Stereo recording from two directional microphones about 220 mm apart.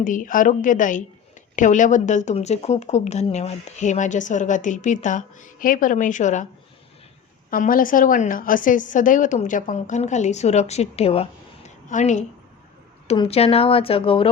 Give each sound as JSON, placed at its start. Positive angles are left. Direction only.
{"t": 0.0, "sound": "speech", "side_deg": 35}
{"t": 7.5, "sound": "speech", "side_deg": 40}